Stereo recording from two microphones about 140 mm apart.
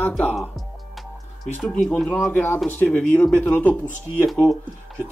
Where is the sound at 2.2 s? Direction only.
15° left (ahead or behind).